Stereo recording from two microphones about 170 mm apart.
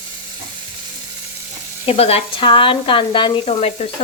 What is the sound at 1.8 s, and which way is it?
Speech, 35° left (ahead or behind).